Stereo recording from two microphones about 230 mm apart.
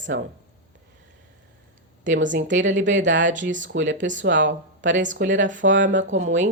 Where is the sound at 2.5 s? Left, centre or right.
Right.